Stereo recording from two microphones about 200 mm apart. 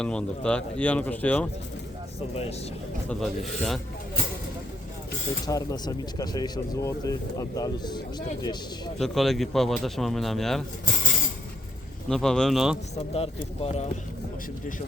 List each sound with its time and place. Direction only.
0.0 s speech: 5° left (ahead or behind)
3.1 s speech: centre (ahead or behind)
5.5 s speech: 20° left (ahead or behind)
9.0 s speech: centre (ahead or behind)
12.0 s speech: 5° left (ahead or behind)
13.1 s speech: 30° left (ahead or behind)